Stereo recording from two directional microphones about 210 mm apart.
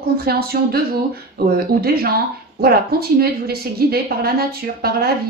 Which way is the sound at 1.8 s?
45° right (ahead or behind).